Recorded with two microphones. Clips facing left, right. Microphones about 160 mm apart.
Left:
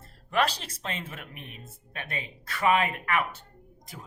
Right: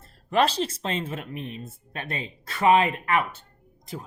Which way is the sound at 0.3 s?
25° right (ahead or behind).